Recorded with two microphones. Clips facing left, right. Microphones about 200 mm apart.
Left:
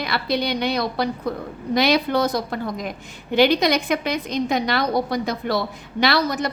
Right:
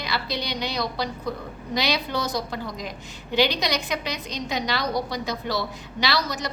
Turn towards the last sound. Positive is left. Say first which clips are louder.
# left 6 dB
turn(degrees=55)  # may be behind; listen again after turning